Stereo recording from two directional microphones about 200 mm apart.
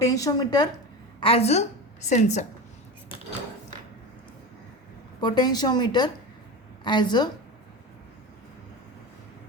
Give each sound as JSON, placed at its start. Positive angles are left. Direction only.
{"t": 0.0, "sound": "a woman's voice", "side_deg": 15}
{"t": 5.2, "sound": "a woman's voice", "side_deg": 20}